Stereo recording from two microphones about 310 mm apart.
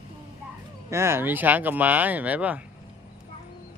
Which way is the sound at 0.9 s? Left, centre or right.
Centre.